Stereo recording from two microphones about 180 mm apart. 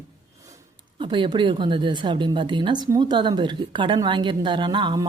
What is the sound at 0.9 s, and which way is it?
A woman's voice, 25° right (ahead or behind).